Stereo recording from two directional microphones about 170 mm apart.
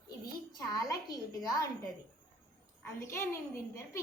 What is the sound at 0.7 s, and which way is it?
Speech, 20° left (ahead or behind).